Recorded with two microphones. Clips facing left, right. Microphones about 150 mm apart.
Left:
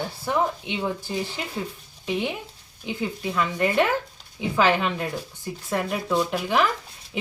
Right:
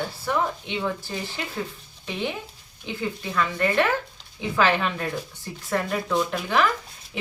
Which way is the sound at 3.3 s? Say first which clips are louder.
Left 1 dB; 15° left (ahead or behind).